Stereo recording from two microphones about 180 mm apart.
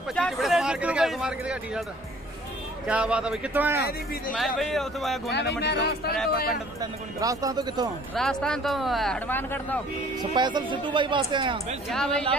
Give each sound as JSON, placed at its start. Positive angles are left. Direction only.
{"t": 0.1, "sound": "speech", "side_deg": 0}
{"t": 2.9, "sound": "speech", "side_deg": -5}
{"t": 4.6, "sound": "speech", "side_deg": 0}
{"t": 5.3, "sound": "speech", "side_deg": 70}
{"t": 6.8, "sound": "speech", "side_deg": -20}
{"t": 8.1, "sound": "speech", "side_deg": 5}
{"t": 10.3, "sound": "speech", "side_deg": -25}
{"t": 11.9, "sound": "speech", "side_deg": 5}